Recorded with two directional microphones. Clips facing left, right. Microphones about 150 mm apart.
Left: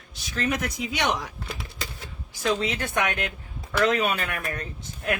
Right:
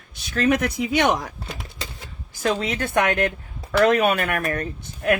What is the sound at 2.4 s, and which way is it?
Speech, 55° right (ahead or behind).